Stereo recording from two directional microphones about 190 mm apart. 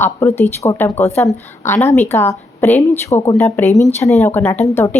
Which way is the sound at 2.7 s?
35° left (ahead or behind).